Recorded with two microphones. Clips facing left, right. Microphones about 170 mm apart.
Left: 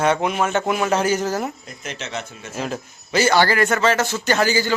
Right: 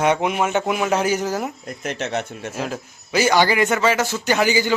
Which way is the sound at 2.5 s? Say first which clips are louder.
Left 2 dB; 5° right (ahead or behind).